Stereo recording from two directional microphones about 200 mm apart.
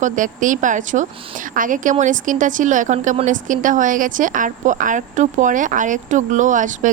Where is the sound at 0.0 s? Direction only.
40° right (ahead or behind).